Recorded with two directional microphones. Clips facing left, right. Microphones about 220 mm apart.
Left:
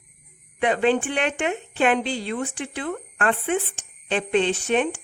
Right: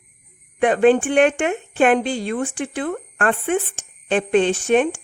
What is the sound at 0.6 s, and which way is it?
Speech, 50° right (ahead or behind).